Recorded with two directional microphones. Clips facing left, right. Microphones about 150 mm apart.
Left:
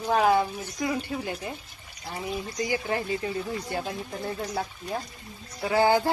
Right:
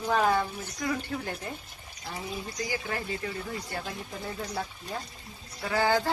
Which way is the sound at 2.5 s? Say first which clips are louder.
Left 6 dB; 20° left (ahead or behind).